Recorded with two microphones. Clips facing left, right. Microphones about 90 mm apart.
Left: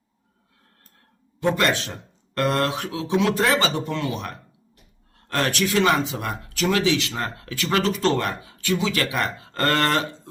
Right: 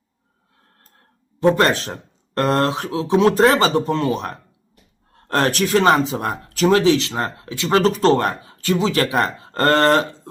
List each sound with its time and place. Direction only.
1.4 s speech: 35° right (ahead or behind)
7.8 s speech: 35° right (ahead or behind)